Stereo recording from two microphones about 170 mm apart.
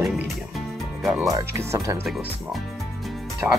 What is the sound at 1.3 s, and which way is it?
Speech, 15° right (ahead or behind).